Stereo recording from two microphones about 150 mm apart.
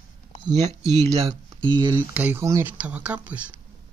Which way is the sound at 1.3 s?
30° right (ahead or behind).